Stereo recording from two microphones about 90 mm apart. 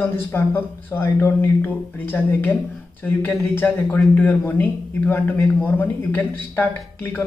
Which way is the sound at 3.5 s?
20° left (ahead or behind).